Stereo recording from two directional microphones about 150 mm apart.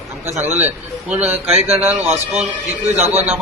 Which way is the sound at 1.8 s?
15° right (ahead or behind).